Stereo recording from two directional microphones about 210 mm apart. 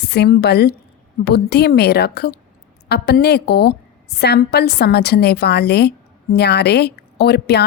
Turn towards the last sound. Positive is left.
turn(degrees=50)  # may be behind; listen again after turning